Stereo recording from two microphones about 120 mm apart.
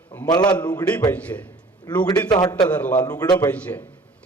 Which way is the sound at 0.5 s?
10° left (ahead or behind).